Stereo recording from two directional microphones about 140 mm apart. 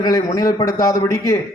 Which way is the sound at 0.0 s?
25° left (ahead or behind).